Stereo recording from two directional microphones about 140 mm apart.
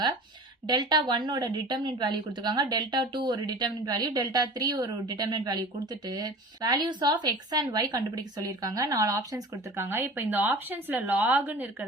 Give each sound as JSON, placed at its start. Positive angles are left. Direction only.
{"t": 0.7, "sound": "a woman's voice", "side_deg": -30}